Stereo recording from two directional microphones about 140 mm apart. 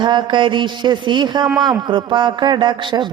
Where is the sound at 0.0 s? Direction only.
30° right (ahead or behind).